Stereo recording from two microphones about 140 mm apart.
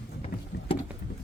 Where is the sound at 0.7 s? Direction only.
40° left (ahead or behind).